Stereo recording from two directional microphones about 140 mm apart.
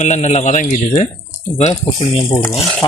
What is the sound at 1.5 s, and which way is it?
Speech, 45° left (ahead or behind).